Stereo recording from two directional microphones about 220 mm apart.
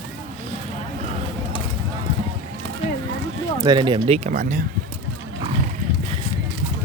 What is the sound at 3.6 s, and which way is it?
Speech, 20° right (ahead or behind).